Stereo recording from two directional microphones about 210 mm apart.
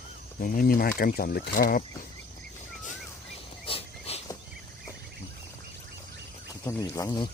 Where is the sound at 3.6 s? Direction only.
25° left (ahead or behind).